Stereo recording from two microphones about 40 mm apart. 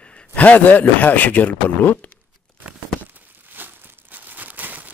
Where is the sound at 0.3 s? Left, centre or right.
Left.